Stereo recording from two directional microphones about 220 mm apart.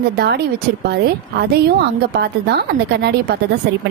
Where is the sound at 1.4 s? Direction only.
45° right (ahead or behind).